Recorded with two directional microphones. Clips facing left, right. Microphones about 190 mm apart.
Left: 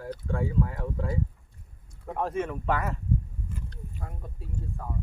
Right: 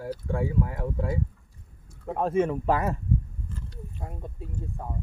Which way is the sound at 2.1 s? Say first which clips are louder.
Right 5 dB; 25° right (ahead or behind).